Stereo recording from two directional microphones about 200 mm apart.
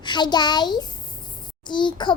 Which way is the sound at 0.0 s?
20° left (ahead or behind).